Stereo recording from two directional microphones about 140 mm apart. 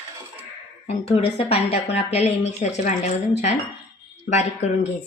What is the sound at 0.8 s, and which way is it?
Speech, 45° left (ahead or behind).